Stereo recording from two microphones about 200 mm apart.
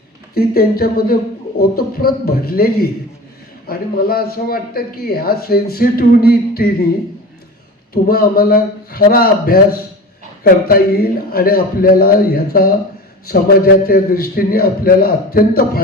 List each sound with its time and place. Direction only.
0.3 s a man's voice: 50° left (ahead or behind)
8.0 s a man's voice: 50° left (ahead or behind)